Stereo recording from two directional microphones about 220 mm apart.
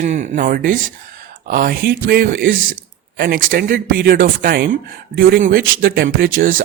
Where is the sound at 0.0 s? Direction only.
35° right (ahead or behind).